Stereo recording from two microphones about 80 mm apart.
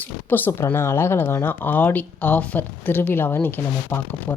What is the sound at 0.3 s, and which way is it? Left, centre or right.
Speech, left.